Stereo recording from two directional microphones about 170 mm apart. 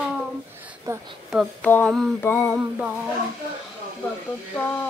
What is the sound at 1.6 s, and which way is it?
Speech, 10° left (ahead or behind).